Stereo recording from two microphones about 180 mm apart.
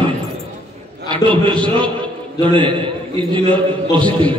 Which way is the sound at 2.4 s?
30° right (ahead or behind).